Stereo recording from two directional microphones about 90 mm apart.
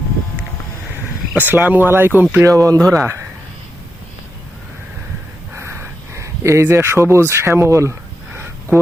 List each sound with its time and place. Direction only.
1.3 s speech: 20° right (ahead or behind)
2.3 s speech: 35° right (ahead or behind)
5.5 s speech: 30° right (ahead or behind)